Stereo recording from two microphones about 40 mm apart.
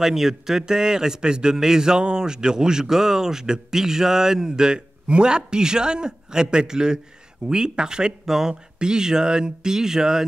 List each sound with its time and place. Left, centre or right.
0.0 s a man's voice: centre